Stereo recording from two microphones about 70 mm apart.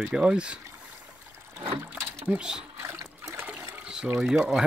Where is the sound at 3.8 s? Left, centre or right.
Centre.